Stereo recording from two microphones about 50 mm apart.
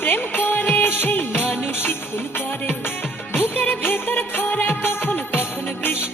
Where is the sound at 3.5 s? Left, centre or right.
Left.